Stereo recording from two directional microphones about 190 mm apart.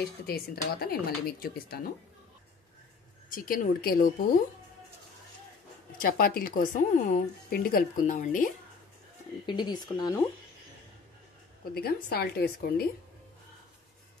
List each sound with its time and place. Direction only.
0.3 s speech: 55° left (ahead or behind)
3.3 s speech: 45° left (ahead or behind)
5.9 s speech: 50° left (ahead or behind)
9.5 s speech: 20° left (ahead or behind)
11.7 s speech: 55° left (ahead or behind)